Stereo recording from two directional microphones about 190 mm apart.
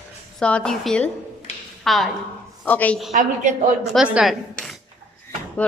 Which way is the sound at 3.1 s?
40° right (ahead or behind).